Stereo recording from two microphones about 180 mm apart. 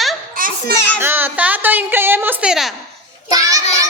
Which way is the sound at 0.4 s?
50° right (ahead or behind).